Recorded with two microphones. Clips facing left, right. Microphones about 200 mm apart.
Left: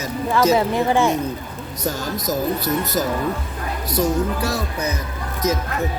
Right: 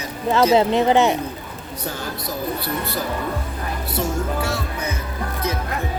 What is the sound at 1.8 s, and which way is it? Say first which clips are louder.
Speech: left 5 dB; 40° left (ahead or behind).